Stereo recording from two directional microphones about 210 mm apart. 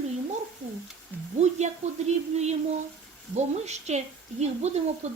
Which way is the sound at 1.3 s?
30° right (ahead or behind).